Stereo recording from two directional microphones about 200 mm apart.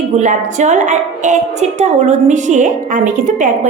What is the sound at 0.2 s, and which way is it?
A woman's voice, 35° right (ahead or behind).